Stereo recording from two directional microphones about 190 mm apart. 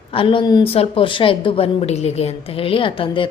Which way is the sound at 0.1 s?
25° left (ahead or behind).